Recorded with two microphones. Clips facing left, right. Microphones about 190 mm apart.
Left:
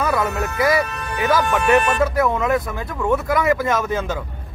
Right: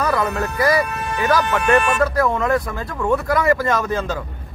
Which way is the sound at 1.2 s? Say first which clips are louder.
Even; 25° left (ahead or behind).